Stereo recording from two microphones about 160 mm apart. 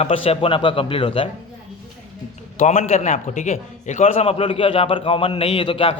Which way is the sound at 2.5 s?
50° left (ahead or behind).